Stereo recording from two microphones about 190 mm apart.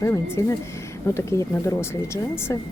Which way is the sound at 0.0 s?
15° left (ahead or behind).